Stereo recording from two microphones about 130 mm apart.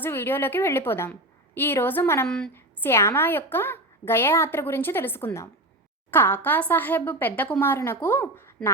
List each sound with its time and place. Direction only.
0.0 s a woman's voice: 15° left (ahead or behind)
2.2 s a woman's voice: 5° left (ahead or behind)
2.5 s a woman's voice: 20° left (ahead or behind)